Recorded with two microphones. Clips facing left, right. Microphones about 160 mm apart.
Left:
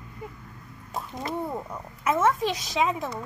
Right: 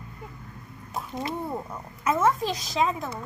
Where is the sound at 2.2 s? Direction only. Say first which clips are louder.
Left 1 dB; centre (ahead or behind).